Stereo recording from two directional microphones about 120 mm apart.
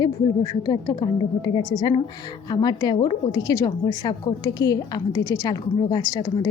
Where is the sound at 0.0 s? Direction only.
35° left (ahead or behind).